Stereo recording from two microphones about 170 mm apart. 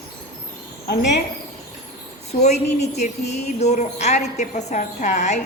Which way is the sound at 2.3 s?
40° left (ahead or behind).